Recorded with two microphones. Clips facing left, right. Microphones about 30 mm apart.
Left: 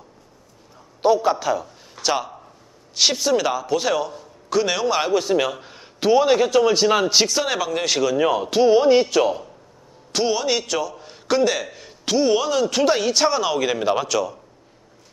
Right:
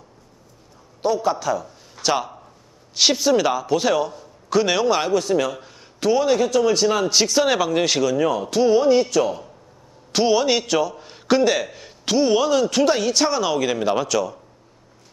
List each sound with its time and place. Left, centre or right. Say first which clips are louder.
1.0 s a man's voice: left 3 dB; centre
2.0 s a man's voice: right 1 dB; centre
7.2 s a man's voice: right 4 dB; centre
10.1 s a man's voice: right 3 dB; centre